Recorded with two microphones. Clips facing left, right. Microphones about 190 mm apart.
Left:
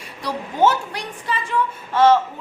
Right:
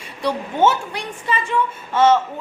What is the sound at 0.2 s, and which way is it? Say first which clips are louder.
Speech: right 1 dB; 25° right (ahead or behind).